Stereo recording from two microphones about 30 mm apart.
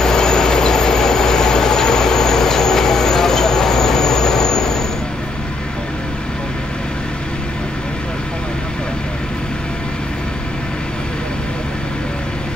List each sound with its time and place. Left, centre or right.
0.0 s train: left